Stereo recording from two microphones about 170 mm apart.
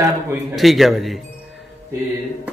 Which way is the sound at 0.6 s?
Centre (ahead or behind).